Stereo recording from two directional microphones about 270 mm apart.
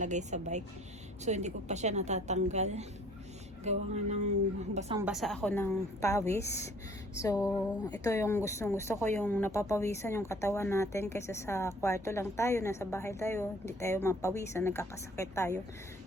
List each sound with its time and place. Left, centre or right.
0.0 s a woman's voice: right
4.9 s speech: centre